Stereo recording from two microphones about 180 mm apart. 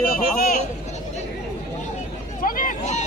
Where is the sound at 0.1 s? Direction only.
55° left (ahead or behind).